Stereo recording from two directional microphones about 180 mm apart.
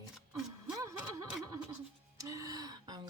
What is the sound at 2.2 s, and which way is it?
Speech, 20° right (ahead or behind).